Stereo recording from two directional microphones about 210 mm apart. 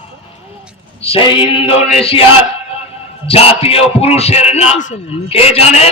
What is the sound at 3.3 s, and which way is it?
Music, 30° left (ahead or behind).